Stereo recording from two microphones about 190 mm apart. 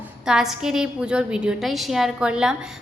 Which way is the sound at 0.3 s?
5° right (ahead or behind).